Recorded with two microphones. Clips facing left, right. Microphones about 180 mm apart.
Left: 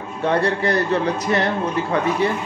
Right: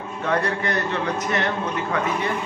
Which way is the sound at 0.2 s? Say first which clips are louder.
Left 4 dB; 30° left (ahead or behind).